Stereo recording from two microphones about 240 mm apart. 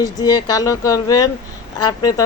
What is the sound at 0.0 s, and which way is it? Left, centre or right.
Speech, centre.